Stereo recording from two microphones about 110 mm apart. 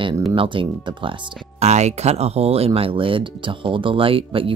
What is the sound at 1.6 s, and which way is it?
Speech, 90° right.